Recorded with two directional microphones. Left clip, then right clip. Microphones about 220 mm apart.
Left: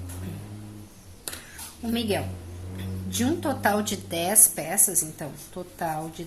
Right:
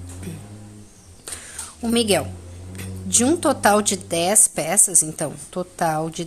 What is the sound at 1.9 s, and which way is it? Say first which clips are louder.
A woman's voice: right 8 dB; 35° right (ahead or behind).